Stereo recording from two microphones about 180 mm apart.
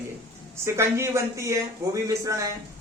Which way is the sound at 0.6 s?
15° right (ahead or behind).